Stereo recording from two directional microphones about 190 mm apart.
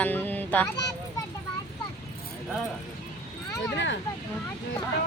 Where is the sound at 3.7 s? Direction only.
70° left (ahead or behind).